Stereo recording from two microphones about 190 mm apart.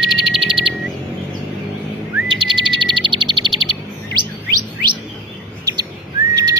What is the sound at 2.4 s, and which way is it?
Bird, 25° right (ahead or behind).